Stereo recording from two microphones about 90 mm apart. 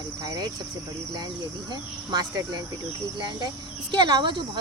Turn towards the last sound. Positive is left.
turn(degrees=-60)  # may be behind; listen again after turning